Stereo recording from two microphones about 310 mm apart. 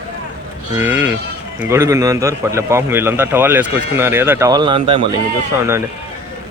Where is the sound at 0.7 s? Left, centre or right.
Centre.